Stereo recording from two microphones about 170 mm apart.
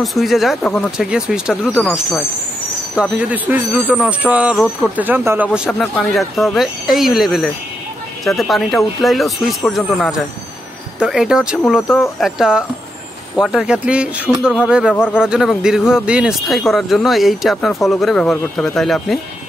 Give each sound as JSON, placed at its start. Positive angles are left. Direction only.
{"t": 0.0, "sound": "speech", "side_deg": 0}